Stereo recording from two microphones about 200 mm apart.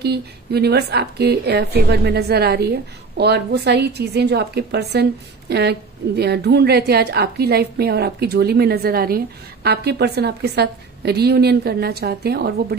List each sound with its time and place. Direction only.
0.0 s a woman's voice: 55° right (ahead or behind)